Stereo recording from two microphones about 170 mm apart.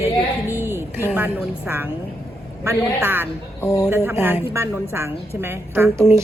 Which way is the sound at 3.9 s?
15° right (ahead or behind).